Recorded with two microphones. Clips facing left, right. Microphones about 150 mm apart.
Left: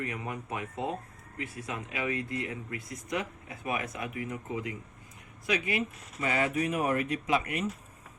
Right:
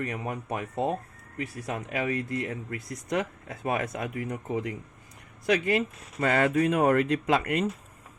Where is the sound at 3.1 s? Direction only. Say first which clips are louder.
Right 5 dB; 60° right (ahead or behind).